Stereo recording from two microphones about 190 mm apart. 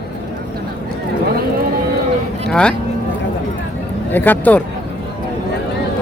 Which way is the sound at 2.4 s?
5° left (ahead or behind).